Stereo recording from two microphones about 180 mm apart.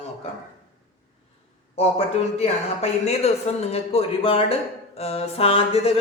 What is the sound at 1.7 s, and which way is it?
Speech, 35° left (ahead or behind).